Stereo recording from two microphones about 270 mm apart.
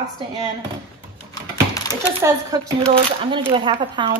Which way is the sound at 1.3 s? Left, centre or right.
Centre.